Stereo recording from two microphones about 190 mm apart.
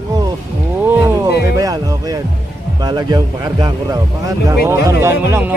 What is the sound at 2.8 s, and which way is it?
Speech, 20° right (ahead or behind).